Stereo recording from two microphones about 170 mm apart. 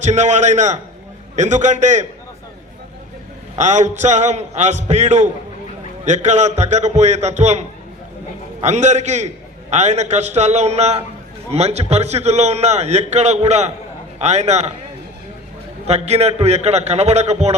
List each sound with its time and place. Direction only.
0.0 s a man's voice: 45° right (ahead or behind)
3.6 s a man's voice: 45° right (ahead or behind)
8.6 s a man's voice: 45° right (ahead or behind)
15.9 s a man's voice: 40° right (ahead or behind)